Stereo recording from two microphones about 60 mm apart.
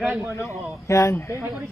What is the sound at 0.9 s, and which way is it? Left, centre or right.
Speech, left.